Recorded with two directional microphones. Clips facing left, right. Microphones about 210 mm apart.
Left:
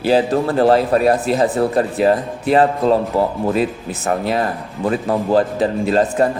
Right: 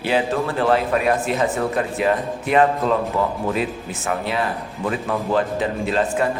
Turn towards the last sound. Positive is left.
turn(degrees=40)  # may be behind; listen again after turning